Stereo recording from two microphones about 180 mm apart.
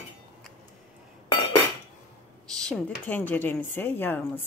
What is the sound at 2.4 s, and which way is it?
A woman's voice, 5° left (ahead or behind).